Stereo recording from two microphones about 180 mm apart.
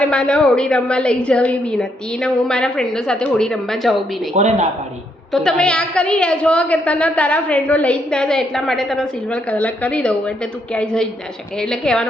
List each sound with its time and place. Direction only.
0.0 s a woman's voice: 5° left (ahead or behind)
4.4 s speech: 40° right (ahead or behind)
5.3 s a woman's voice: 5° left (ahead or behind)